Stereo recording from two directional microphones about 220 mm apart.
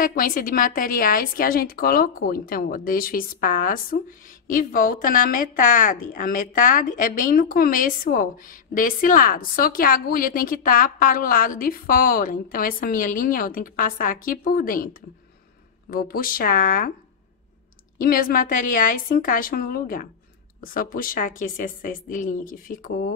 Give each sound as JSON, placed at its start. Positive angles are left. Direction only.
{"t": 0.0, "sound": "a woman's voice", "side_deg": 40}
{"t": 15.9, "sound": "a woman's voice", "side_deg": 40}
{"t": 17.9, "sound": "a woman's voice", "side_deg": 40}